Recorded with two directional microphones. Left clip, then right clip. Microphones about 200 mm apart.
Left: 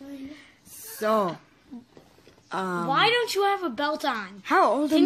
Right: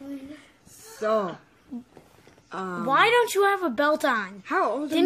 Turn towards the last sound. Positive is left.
turn(degrees=45)  # may be behind; listen again after turning